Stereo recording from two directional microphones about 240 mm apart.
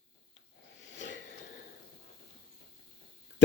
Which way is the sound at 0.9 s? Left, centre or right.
Left.